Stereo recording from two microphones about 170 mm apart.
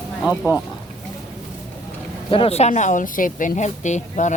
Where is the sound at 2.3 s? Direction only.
35° left (ahead or behind).